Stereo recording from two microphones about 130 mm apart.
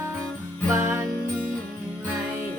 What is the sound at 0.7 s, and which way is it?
Music, 20° right (ahead or behind).